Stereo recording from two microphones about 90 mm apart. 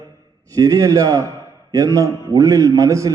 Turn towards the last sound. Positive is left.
turn(degrees=-35)  # may be behind; listen again after turning